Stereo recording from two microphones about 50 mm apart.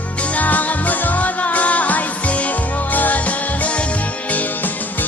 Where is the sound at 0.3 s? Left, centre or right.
Left.